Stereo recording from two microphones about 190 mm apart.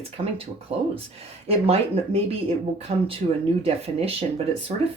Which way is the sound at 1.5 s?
30° right (ahead or behind).